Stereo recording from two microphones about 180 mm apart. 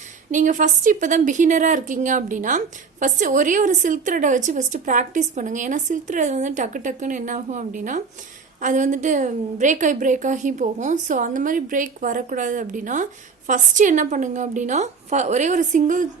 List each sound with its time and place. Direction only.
0.3 s a woman's voice: 45° right (ahead or behind)